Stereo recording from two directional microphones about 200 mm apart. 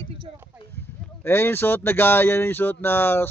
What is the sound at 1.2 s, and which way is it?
Speech, 10° left (ahead or behind).